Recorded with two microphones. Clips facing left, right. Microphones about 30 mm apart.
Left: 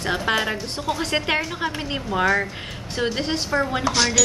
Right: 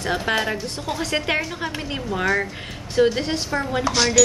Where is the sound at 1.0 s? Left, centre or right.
Centre.